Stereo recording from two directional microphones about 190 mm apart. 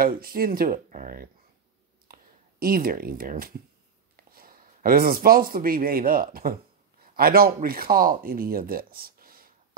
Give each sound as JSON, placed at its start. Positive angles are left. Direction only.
{"t": 0.0, "sound": "speech", "side_deg": -50}
{"t": 2.6, "sound": "a man's voice", "side_deg": -50}